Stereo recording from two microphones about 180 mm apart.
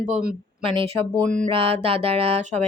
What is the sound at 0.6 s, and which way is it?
Speech, 30° right (ahead or behind).